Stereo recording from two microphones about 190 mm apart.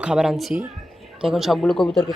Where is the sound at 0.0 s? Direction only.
5° right (ahead or behind).